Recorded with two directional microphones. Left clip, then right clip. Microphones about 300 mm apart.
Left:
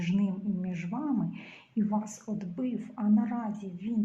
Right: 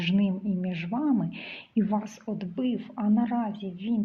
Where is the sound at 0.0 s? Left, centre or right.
Right.